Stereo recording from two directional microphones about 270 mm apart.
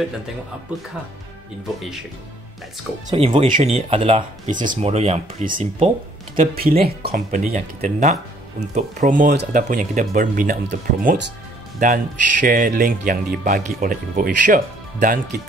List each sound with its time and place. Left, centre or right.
3.1 s speech: right